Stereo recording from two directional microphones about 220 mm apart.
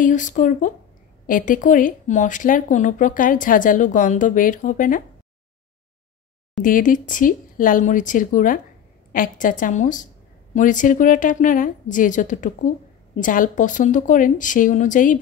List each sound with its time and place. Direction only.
0.0 s a woman's voice: 35° left (ahead or behind)
6.6 s a woman's voice: 35° left (ahead or behind)